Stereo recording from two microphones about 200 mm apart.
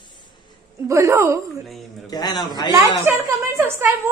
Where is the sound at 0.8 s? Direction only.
15° right (ahead or behind).